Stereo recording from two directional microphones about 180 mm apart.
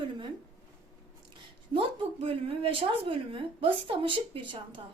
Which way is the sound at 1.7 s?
30° right (ahead or behind).